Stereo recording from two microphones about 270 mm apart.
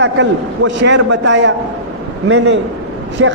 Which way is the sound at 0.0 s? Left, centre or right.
Right.